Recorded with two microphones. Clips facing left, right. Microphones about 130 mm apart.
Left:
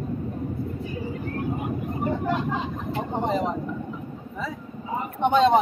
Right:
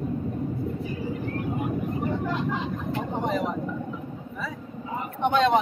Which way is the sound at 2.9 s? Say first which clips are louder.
Left 2 dB; 30° left (ahead or behind).